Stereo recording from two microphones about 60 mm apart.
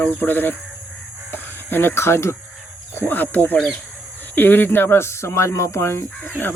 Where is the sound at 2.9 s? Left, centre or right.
Left.